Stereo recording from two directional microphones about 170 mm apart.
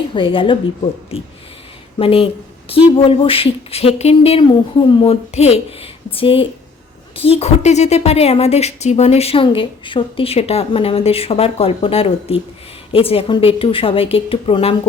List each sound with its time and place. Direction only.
0.1 s speech: 30° left (ahead or behind)
2.0 s a woman's voice: 35° left (ahead or behind)